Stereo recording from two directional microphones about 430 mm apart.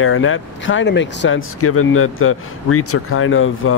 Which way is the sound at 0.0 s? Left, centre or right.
Left.